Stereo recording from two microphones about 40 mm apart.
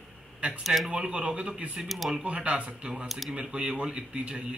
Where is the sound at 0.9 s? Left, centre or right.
Right.